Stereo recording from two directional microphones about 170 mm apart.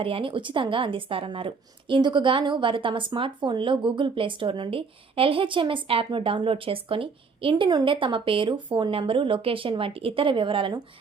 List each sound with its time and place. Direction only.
0.0 s a woman's voice: 30° right (ahead or behind)